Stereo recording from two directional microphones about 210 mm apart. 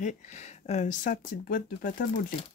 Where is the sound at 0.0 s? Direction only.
30° left (ahead or behind).